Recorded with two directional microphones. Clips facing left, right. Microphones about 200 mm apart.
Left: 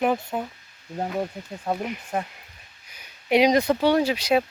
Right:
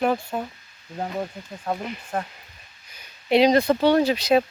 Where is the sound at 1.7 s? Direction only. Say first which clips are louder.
Left 1 dB; 10° left (ahead or behind).